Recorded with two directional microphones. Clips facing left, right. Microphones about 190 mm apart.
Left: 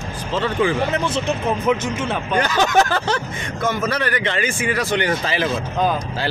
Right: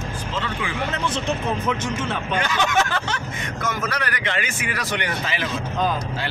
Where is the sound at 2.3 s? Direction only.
40° left (ahead or behind).